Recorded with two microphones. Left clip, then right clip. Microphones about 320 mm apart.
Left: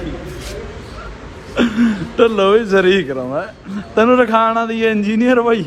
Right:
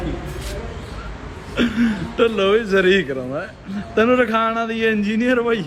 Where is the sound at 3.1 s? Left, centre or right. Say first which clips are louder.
Left 5 dB; left.